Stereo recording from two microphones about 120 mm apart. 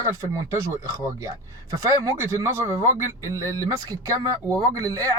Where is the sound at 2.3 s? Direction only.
25° right (ahead or behind).